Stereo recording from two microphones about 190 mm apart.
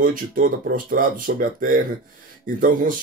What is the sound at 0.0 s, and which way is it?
Speech, 50° right (ahead or behind).